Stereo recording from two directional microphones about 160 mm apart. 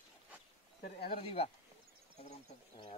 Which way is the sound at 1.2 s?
35° left (ahead or behind).